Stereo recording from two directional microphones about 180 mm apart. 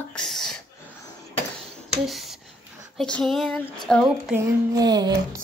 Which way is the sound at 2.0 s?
Centre (ahead or behind).